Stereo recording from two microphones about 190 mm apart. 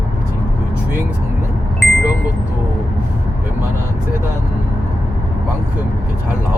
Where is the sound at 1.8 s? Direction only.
Centre (ahead or behind).